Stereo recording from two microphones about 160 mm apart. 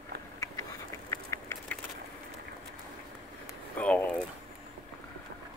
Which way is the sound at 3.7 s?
10° left (ahead or behind).